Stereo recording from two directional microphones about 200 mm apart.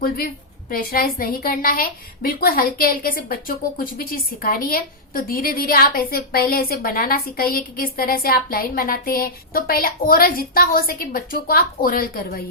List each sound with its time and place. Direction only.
0.7 s a woman's voice: 45° left (ahead or behind)